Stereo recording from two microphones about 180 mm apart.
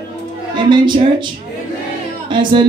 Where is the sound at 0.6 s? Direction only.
25° right (ahead or behind).